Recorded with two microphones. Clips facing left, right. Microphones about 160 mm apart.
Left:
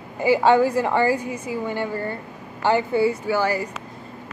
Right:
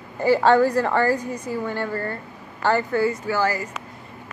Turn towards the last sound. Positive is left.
turn(degrees=15)  # may be behind; listen again after turning